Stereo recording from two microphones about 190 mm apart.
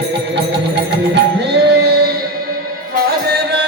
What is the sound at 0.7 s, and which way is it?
Music, 60° right (ahead or behind).